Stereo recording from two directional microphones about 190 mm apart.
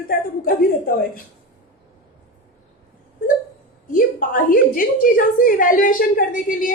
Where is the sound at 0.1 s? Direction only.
50° left (ahead or behind).